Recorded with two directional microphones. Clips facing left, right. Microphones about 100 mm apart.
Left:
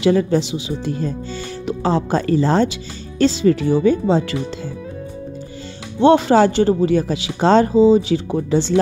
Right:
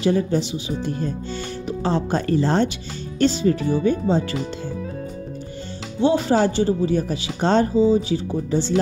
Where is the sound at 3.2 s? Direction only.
90° left.